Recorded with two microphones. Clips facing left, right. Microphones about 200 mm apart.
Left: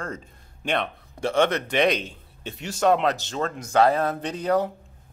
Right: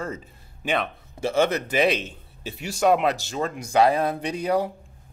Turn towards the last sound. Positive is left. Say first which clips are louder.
# even
turn(degrees=-10)  # may be behind; listen again after turning